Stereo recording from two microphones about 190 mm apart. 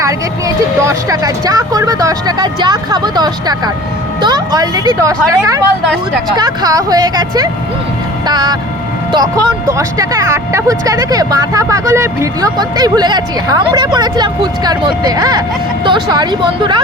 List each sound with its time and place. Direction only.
0.0 s speech: 15° right (ahead or behind)